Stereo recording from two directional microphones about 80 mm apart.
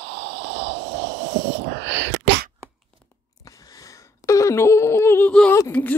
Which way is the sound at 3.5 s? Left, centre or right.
Left.